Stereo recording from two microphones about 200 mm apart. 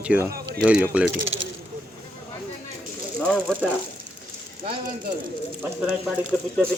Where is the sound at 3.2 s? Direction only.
5° left (ahead or behind).